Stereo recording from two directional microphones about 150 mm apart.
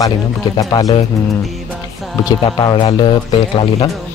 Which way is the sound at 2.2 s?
25° left (ahead or behind).